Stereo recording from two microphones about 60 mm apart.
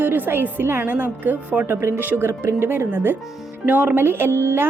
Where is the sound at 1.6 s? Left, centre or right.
Right.